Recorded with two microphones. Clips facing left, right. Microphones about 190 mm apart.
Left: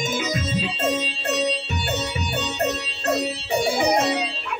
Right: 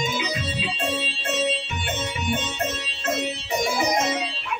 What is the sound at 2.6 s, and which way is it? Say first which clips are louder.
Music: left 4 dB; 35° left (ahead or behind).